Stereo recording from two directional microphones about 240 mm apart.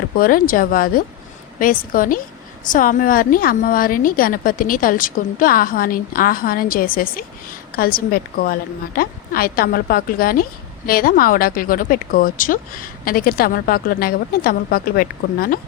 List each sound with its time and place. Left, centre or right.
0.2 s speech: left